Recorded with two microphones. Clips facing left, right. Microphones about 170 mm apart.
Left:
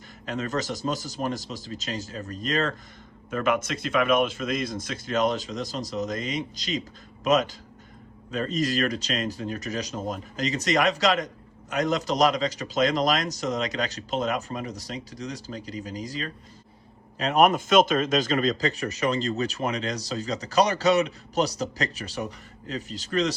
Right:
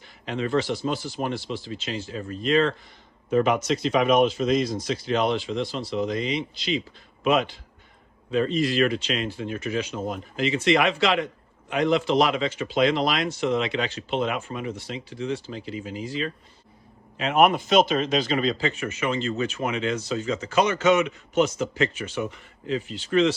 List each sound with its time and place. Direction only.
0.3 s speech: 45° left (ahead or behind)
3.2 s speech: 50° left (ahead or behind)